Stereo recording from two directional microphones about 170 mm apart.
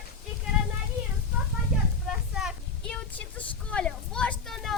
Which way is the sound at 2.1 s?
5° right (ahead or behind).